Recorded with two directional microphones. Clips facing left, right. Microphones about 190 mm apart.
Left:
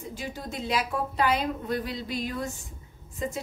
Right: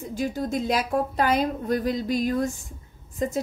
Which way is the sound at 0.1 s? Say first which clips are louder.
Right 12 dB; 45° right (ahead or behind).